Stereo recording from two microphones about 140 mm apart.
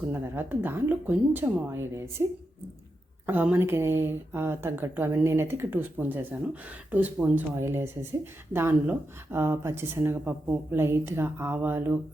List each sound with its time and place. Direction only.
0.1 s speech: 15° right (ahead or behind)
3.2 s speech: 15° right (ahead or behind)